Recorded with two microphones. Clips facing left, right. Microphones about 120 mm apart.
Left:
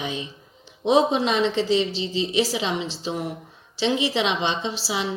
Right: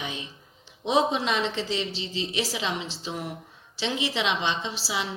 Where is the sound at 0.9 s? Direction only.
25° left (ahead or behind).